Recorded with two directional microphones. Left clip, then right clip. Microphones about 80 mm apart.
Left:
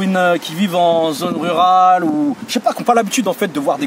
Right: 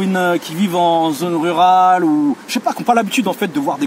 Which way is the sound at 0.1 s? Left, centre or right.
Left.